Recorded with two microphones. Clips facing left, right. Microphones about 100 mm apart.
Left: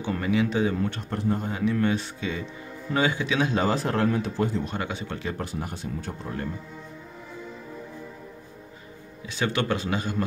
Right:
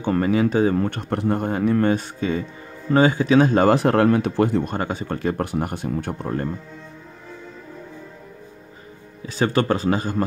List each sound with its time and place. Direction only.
0.0 s speech: 45° right (ahead or behind); by 4.7 s 60° right (ahead or behind)
4.7 s speech: 45° right (ahead or behind); by 6.3 s 60° right (ahead or behind)
9.2 s speech: 40° right (ahead or behind)